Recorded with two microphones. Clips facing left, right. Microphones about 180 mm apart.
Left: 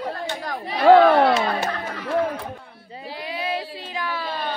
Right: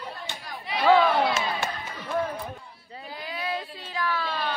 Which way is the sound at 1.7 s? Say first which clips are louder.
Left 6 dB; 70° left (ahead or behind).